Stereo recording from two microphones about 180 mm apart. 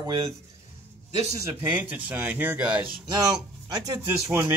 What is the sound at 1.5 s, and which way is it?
Speech, 15° right (ahead or behind).